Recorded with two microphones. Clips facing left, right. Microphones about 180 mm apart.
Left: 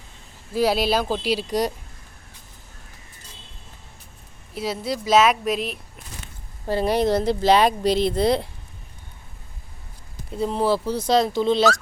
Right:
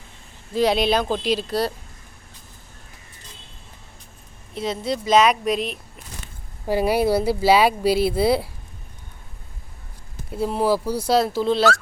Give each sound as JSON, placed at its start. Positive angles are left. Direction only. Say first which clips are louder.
{"t": 0.5, "sound": "speech", "louder": "right 1 dB", "side_deg": 5}
{"t": 4.5, "sound": "a woman's voice", "louder": "right 1 dB", "side_deg": 5}
{"t": 6.7, "sound": "speech", "louder": "right 1 dB", "side_deg": -10}
{"t": 10.3, "sound": "a woman's voice", "louder": "right 1 dB", "side_deg": -5}